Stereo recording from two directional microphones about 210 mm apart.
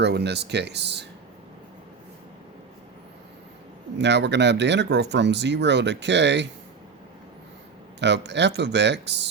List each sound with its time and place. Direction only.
0.0 s speech: 50° right (ahead or behind)
3.9 s speech: 55° right (ahead or behind)
7.9 s speech: 55° right (ahead or behind)